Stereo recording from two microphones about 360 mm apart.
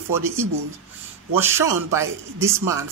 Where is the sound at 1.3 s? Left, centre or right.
Centre.